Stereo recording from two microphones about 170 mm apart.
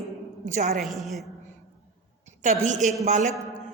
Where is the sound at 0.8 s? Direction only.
Centre (ahead or behind).